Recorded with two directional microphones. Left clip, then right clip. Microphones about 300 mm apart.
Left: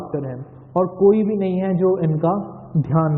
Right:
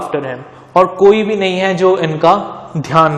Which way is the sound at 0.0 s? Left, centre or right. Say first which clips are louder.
Right 9 dB; centre.